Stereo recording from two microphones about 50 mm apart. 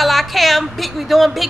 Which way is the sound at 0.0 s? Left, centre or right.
Centre.